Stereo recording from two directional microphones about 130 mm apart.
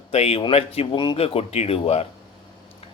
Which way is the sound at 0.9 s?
35° left (ahead or behind).